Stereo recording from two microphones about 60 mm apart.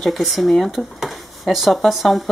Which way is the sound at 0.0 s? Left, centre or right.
Centre.